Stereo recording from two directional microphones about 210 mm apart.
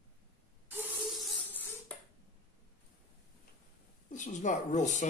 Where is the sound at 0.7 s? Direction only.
10° right (ahead or behind).